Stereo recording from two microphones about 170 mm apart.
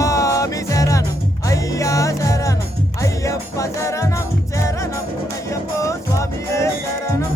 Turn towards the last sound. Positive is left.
turn(degrees=15)  # may be behind; listen again after turning